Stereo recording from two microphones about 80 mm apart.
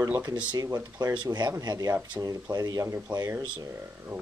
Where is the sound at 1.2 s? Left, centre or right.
Right.